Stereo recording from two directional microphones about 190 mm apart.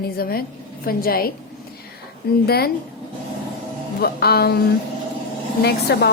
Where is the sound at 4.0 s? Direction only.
55° left (ahead or behind).